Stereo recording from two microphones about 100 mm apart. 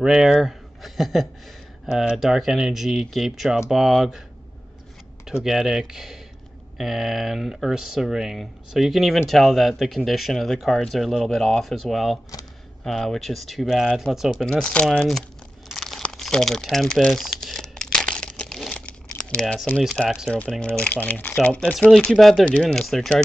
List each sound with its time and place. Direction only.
0.0 s speech: 5° right (ahead or behind)
5.4 s speech: 5° right (ahead or behind)
14.4 s speech: 10° left (ahead or behind)
15.7 s crumpling: 5° left (ahead or behind)
19.4 s speech: 5° left (ahead or behind)
20.3 s speech: 10° left (ahead or behind)
21.5 s speech: 10° left (ahead or behind)